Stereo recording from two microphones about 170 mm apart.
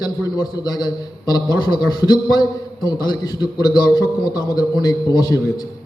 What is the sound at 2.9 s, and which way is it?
A man's voice, 25° left (ahead or behind).